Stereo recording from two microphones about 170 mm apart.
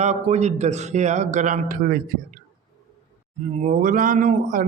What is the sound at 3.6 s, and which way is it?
Speech, 50° right (ahead or behind).